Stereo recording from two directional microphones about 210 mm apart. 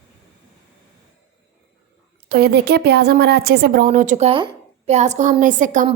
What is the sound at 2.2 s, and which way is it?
A woman's voice, 50° right (ahead or behind).